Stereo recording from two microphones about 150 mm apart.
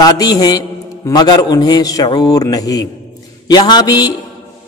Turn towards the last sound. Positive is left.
turn(degrees=25)  # may be behind; listen again after turning